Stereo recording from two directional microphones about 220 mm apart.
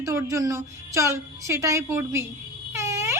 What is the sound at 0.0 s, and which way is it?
A woman's voice, 10° right (ahead or behind).